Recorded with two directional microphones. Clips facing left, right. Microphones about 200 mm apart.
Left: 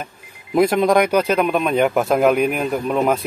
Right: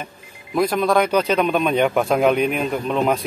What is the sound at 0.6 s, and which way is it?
Speech, 25° left (ahead or behind).